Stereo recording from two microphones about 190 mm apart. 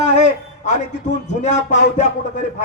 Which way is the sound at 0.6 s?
40° left (ahead or behind).